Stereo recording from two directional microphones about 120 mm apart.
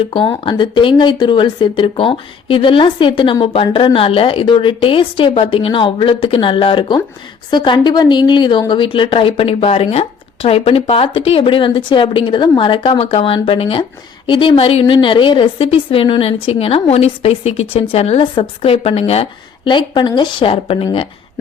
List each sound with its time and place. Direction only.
0.1 s a woman's voice: 45° left (ahead or behind)
19.6 s a woman's voice: 40° left (ahead or behind)